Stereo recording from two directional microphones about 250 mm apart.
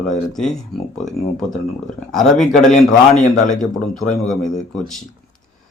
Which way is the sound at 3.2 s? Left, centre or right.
Left.